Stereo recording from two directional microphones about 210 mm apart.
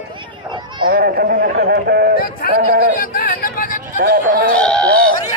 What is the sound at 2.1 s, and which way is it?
Speech, 45° left (ahead or behind).